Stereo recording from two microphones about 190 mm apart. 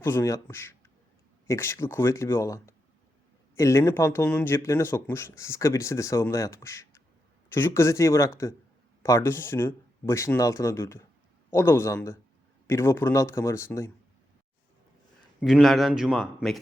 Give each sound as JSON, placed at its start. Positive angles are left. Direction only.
{"t": 0.0, "sound": "speech", "side_deg": 15}
{"t": 15.4, "sound": "a man's voice", "side_deg": 0}